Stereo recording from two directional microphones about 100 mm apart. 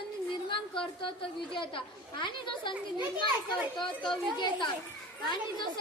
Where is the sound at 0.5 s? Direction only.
55° left (ahead or behind).